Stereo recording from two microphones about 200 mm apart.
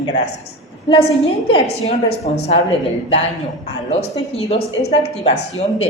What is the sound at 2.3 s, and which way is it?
Speech, 30° left (ahead or behind).